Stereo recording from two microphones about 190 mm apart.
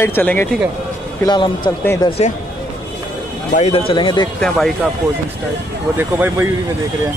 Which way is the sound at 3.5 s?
35° left (ahead or behind).